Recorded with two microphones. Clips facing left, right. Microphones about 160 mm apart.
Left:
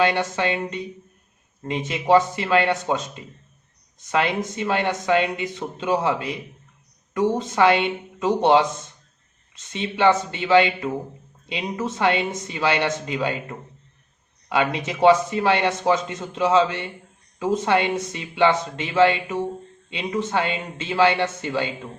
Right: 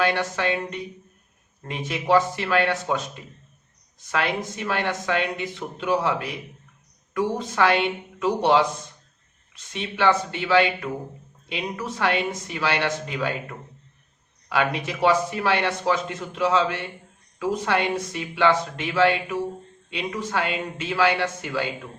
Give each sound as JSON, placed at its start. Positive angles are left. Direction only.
{"t": 0.0, "sound": "a man's voice", "side_deg": 20}